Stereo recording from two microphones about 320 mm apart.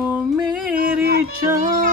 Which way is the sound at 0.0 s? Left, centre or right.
Centre.